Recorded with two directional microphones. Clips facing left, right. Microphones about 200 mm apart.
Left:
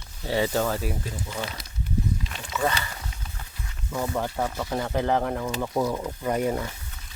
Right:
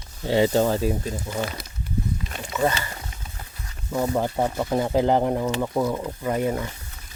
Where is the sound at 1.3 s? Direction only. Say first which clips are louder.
Right 6 dB; 45° right (ahead or behind).